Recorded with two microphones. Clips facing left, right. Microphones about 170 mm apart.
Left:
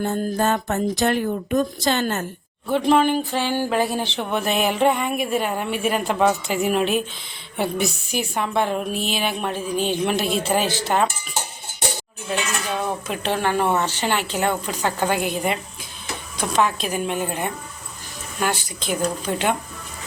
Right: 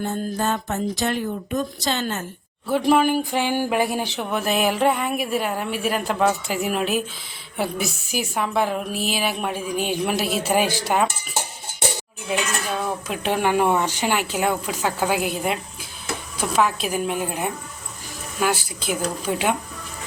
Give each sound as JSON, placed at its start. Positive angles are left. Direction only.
{"t": 0.0, "sound": "speech", "side_deg": 55}
{"t": 2.6, "sound": "a woman's voice", "side_deg": -5}
{"t": 12.3, "sound": "a woman's voice", "side_deg": -10}